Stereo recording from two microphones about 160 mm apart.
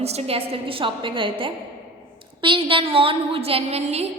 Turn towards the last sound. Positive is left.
turn(degrees=-40)  # may be behind; listen again after turning